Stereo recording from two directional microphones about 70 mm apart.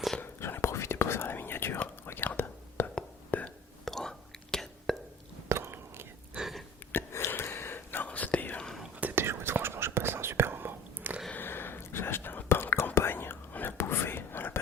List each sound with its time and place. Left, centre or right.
0.2 s whispering: left
3.8 s whispering: centre
5.5 s whispering: right
6.4 s a sound: centre
6.9 s whispering: left
9.0 s whispering: right
9.2 s whispering: right
11.3 s whispering: left